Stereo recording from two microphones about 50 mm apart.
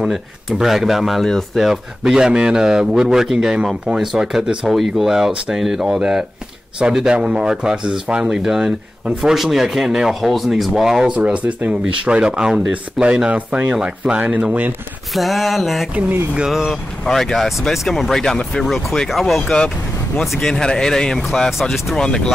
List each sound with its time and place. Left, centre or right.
0.0 s speech: centre
11.1 s speech: right
15.1 s speech: centre
17.0 s speech: centre
18.6 s speech: centre
19.4 s speech: centre
21.5 s speech: centre
21.9 s speech: centre